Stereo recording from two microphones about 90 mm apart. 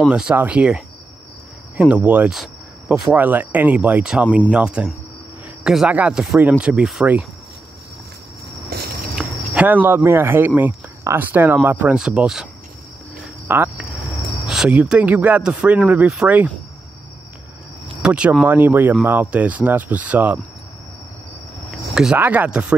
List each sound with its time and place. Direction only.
0.1 s speech: 15° right (ahead or behind)
2.3 s a sound: 5° right (ahead or behind)
3.2 s a man's voice: 20° right (ahead or behind)
9.1 s speech: 15° right (ahead or behind)
13.5 s speech: 20° right (ahead or behind)
14.5 s a sound: 5° right (ahead or behind)
14.8 s speech: 15° right (ahead or behind)
18.0 s speech: 10° right (ahead or behind)
21.6 s cricket: 5° right (ahead or behind)
22.2 s speech: 20° right (ahead or behind)